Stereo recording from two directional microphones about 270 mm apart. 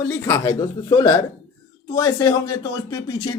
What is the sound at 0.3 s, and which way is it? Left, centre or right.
Speech, centre.